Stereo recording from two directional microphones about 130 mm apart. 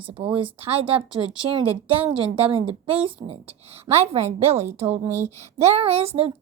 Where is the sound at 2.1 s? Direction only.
45° right (ahead or behind).